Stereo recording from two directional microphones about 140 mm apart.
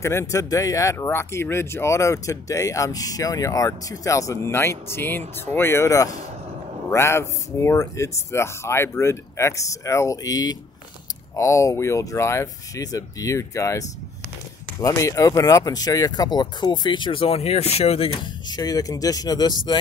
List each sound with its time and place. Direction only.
0.0 s speech: 20° left (ahead or behind); by 18.3 s 45° left (ahead or behind)
18.5 s speech: 25° left (ahead or behind)